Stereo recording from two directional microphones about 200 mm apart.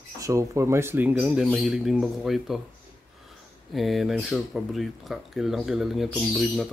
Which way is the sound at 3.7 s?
Centre (ahead or behind).